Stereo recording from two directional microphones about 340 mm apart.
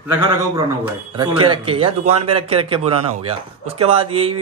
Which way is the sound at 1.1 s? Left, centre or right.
Centre.